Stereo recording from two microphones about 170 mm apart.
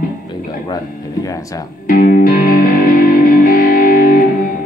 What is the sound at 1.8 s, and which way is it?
Music, 55° left (ahead or behind).